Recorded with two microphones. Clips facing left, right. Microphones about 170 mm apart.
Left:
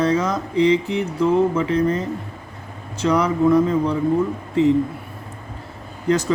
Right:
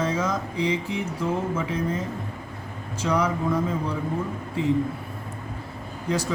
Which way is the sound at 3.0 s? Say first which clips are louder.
Left 5 dB; 65° left (ahead or behind).